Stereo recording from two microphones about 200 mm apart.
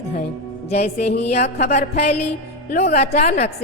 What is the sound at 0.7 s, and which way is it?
A woman's voice, 30° left (ahead or behind).